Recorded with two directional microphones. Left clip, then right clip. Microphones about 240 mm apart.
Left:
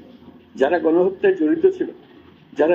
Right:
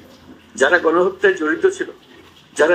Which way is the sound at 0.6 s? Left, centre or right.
Right.